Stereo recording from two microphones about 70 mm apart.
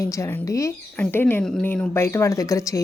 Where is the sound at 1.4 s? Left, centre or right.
Centre.